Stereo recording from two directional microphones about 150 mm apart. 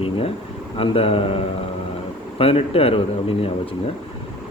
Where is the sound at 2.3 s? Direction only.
40° left (ahead or behind).